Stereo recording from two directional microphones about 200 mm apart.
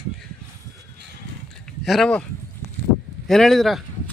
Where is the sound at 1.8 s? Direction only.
Centre (ahead or behind).